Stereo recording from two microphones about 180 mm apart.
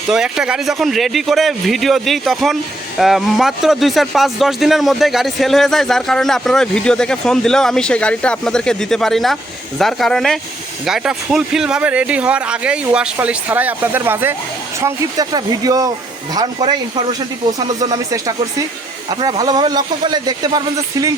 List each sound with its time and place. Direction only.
0.1 s a man's voice: 5° right (ahead or behind); by 20.6 s 25° right (ahead or behind)